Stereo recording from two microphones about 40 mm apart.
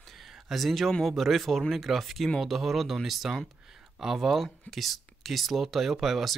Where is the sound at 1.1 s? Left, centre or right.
Centre.